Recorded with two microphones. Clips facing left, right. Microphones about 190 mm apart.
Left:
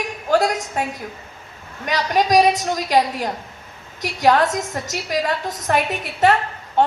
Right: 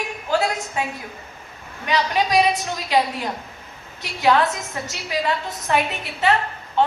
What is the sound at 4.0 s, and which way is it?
A woman's voice, 45° left (ahead or behind).